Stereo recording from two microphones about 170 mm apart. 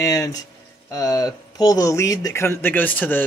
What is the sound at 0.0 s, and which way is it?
Speech, 20° left (ahead or behind).